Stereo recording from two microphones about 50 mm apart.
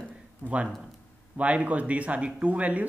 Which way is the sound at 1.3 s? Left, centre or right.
Right.